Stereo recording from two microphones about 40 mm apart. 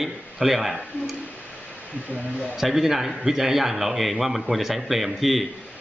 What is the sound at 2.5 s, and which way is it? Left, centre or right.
Speech, centre.